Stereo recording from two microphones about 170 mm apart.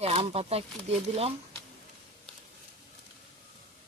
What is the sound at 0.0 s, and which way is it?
Speech, 35° right (ahead or behind).